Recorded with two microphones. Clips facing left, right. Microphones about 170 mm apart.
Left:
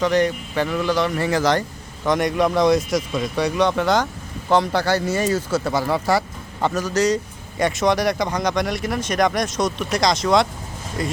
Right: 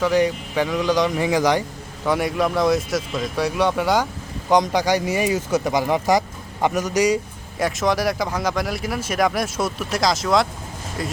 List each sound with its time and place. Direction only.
0.0 s speech: 10° right (ahead or behind)
7.6 s speech: centre (ahead or behind)